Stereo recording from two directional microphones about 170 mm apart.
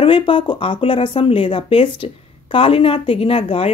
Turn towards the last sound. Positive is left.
turn(degrees=35)  # may be behind; listen again after turning